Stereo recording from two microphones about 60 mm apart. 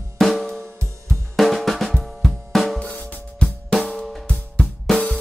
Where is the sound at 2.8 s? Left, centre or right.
Left.